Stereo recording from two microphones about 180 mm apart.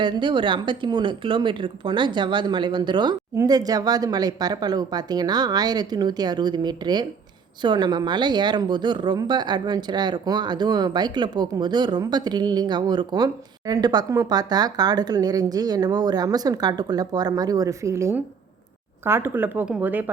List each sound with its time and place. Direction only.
0.0 s speech: 25° right (ahead or behind); by 20.1 s 10° right (ahead or behind)